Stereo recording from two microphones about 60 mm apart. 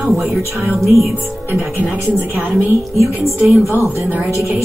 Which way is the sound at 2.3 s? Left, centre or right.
Centre.